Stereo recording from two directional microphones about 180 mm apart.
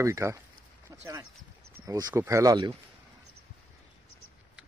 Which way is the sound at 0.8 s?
15° right (ahead or behind).